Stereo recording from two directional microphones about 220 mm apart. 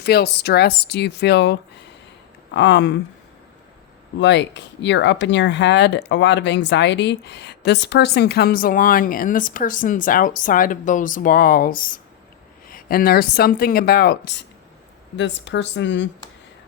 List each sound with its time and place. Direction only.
0.0 s speech: 45° left (ahead or behind)
4.2 s speech: 55° left (ahead or behind)